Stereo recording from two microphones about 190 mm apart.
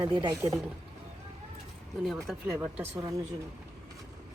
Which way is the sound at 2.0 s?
Centre (ahead or behind).